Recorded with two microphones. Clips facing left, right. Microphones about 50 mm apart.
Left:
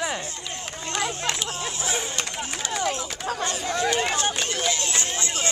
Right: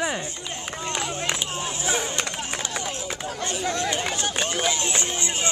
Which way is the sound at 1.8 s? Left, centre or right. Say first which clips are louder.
Right 3 dB; right.